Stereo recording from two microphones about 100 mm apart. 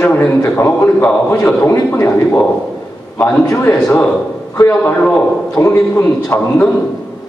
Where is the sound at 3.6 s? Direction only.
15° left (ahead or behind).